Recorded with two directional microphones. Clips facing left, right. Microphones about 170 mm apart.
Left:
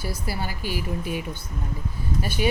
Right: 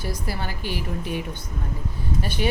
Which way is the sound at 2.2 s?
10° left (ahead or behind).